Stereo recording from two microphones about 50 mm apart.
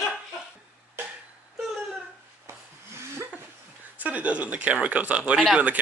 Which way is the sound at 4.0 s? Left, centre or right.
Right.